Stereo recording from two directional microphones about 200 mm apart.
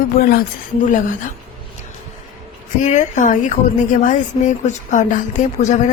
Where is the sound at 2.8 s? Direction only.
40° left (ahead or behind).